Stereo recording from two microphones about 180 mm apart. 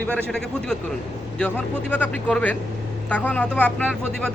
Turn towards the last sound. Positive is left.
turn(degrees=5)  # may be behind; listen again after turning